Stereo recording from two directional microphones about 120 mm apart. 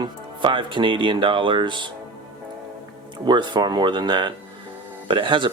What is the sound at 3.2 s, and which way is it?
Speech, 40° right (ahead or behind).